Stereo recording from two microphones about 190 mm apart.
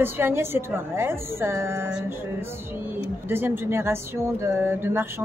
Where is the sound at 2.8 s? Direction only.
10° right (ahead or behind).